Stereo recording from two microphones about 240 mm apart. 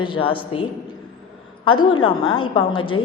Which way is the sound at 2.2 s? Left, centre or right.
Left.